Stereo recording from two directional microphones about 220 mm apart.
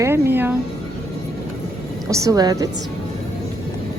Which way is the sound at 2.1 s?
15° right (ahead or behind).